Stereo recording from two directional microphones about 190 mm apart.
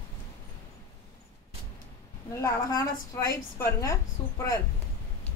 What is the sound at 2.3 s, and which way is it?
A woman's voice, 15° left (ahead or behind).